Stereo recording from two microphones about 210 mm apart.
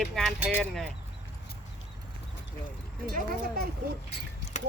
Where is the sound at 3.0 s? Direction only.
45° right (ahead or behind).